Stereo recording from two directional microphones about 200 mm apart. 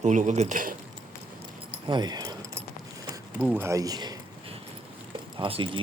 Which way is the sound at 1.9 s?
20° right (ahead or behind).